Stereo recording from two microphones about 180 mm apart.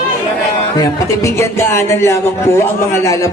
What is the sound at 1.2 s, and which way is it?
Music, 15° left (ahead or behind).